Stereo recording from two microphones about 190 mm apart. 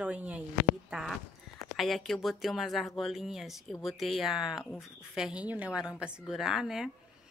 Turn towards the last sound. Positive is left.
turn(degrees=0)  # may be behind; listen again after turning